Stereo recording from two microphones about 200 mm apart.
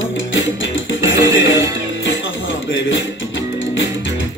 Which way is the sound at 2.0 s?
70° left (ahead or behind).